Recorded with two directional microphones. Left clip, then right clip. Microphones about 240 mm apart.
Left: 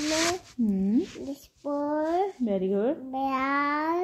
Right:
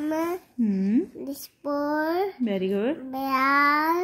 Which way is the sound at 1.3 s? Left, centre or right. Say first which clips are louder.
Right 2 dB; right.